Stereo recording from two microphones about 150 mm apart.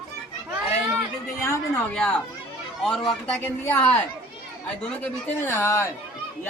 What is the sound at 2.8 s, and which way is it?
Speech, 5° left (ahead or behind).